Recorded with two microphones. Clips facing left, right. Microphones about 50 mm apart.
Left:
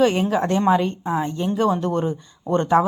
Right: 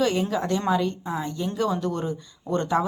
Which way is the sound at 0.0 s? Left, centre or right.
Left.